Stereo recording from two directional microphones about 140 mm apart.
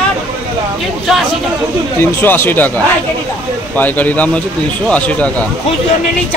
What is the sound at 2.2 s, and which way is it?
Speech, 15° left (ahead or behind).